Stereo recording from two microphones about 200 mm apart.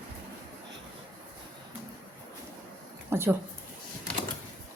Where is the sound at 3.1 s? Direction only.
10° right (ahead or behind).